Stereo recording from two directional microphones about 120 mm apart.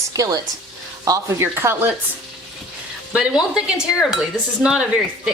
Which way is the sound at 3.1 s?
5° right (ahead or behind).